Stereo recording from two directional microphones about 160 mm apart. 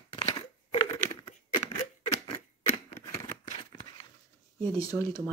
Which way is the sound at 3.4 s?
40° left (ahead or behind).